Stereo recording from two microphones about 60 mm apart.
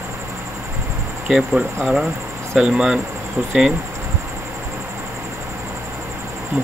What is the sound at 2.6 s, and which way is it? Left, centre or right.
Speech, centre.